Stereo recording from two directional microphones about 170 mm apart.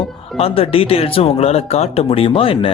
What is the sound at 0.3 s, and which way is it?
Speech, 35° left (ahead or behind).